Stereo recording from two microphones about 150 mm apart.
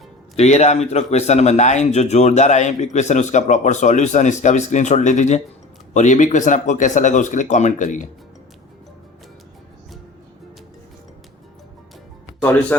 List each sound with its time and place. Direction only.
0.3 s a man's voice: 50° left (ahead or behind)